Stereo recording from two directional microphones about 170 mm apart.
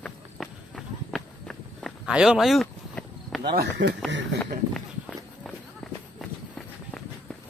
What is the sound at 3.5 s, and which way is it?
Speech, 80° right.